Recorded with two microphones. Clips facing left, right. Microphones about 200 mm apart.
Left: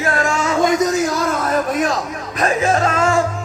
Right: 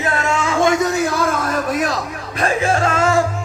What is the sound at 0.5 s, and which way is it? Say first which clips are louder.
Music: even; 30° right (ahead or behind).